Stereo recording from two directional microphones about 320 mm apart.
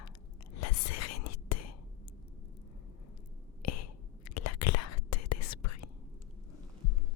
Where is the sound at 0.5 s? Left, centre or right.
Left.